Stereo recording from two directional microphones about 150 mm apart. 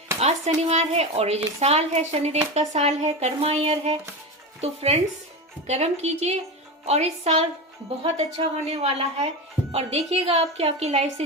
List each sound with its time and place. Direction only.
0.2 s speech: 45° right (ahead or behind)